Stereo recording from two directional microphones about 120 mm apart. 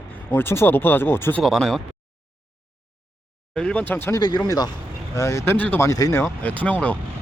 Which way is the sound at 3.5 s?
5° left (ahead or behind).